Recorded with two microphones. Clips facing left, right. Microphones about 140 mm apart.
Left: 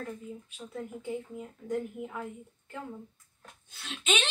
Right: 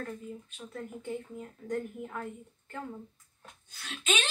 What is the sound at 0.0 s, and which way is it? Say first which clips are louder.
A woman's voice: even; 5° left (ahead or behind).